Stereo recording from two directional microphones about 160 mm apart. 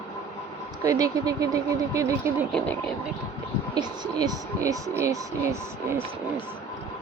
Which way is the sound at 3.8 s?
25° right (ahead or behind).